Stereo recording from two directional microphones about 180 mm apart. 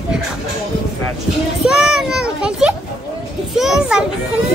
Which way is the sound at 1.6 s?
5° right (ahead or behind).